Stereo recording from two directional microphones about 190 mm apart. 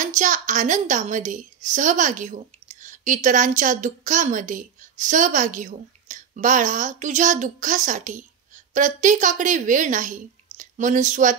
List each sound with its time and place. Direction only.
0.0 s a woman's voice: 40° right (ahead or behind)